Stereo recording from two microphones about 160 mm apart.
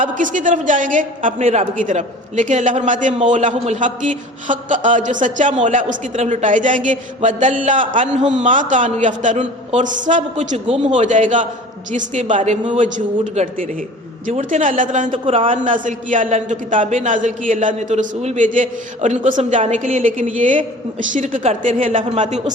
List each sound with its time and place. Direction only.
0.0 s a man's voice: 55° right (ahead or behind)
15.1 s a man's voice: 35° right (ahead or behind)
15.5 s a man's voice: 55° right (ahead or behind)